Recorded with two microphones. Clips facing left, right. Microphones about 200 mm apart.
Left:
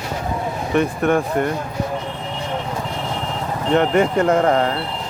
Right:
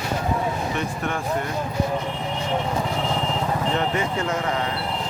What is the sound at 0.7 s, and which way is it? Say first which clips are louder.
Speech: left 10 dB; 55° left (ahead or behind).